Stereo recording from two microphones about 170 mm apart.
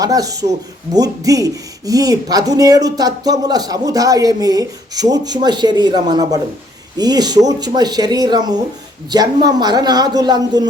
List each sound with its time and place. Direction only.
0.0 s speech: 20° right (ahead or behind)